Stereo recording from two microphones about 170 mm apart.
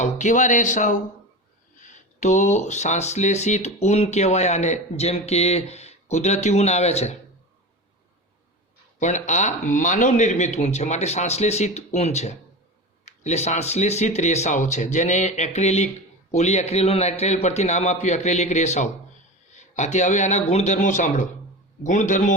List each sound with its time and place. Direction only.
0.0 s speech: 45° left (ahead or behind)
9.0 s speech: 45° left (ahead or behind)